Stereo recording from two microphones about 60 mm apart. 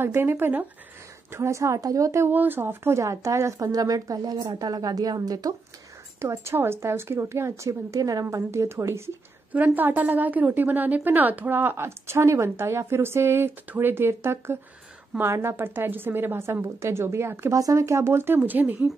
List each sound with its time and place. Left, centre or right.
0.0 s a woman's voice: right
1.3 s a woman's voice: right
2.2 s a woman's voice: right
3.0 s a woman's voice: right
6.2 s a woman's voice: right
6.5 s a woman's voice: right
8.5 s a woman's voice: right
9.5 s a woman's voice: right
17.5 s a woman's voice: right